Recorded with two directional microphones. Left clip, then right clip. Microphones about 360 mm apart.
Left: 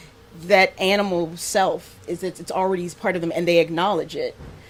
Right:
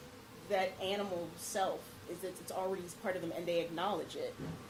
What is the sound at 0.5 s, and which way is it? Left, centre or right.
Speech, left.